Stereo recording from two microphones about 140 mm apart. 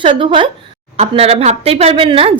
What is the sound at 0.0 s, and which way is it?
Speech, 35° right (ahead or behind).